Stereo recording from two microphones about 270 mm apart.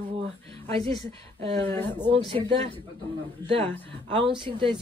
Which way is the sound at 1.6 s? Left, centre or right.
Centre.